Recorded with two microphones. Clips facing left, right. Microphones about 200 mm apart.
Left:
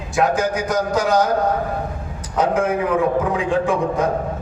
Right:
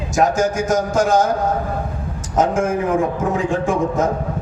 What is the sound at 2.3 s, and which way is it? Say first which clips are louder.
A man's voice: right 1 dB; 45° right (ahead or behind).